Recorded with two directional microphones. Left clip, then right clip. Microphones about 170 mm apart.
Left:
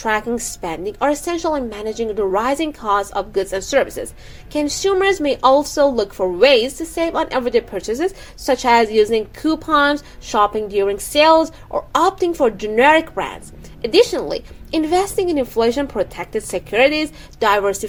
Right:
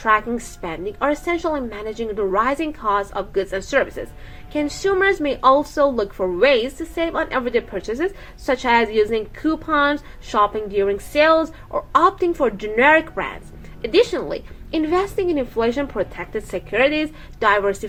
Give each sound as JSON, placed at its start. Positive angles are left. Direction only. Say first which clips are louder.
{"t": 0.0, "sound": "a woman's voice", "louder": "right 1 dB", "side_deg": 35}